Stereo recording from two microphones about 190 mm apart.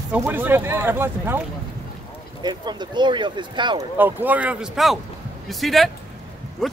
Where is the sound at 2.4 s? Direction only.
25° right (ahead or behind).